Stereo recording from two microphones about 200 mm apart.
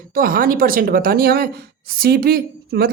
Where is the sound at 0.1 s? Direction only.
45° right (ahead or behind).